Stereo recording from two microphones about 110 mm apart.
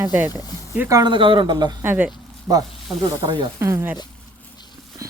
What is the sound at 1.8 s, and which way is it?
Speech, 15° right (ahead or behind).